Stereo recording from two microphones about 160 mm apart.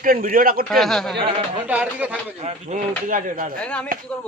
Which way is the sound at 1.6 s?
10° right (ahead or behind).